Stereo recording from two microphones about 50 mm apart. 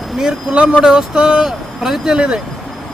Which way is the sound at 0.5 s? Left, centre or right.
Right.